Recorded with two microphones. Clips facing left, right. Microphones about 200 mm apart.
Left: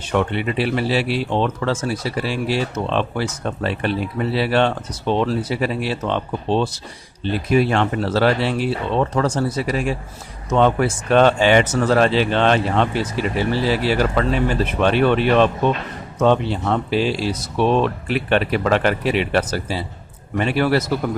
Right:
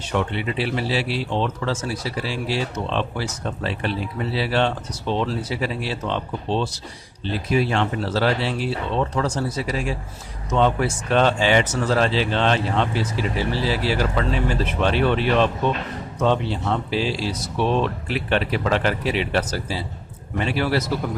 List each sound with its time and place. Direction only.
0.1 s speech: 55° left (ahead or behind)